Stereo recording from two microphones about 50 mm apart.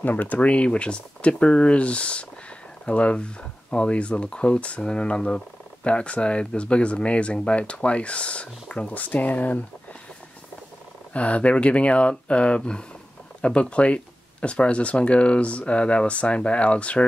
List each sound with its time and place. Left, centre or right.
0.0 s speech: left
11.1 s speech: left